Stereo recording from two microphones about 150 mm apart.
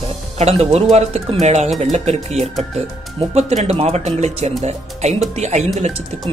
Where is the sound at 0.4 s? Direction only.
45° right (ahead or behind).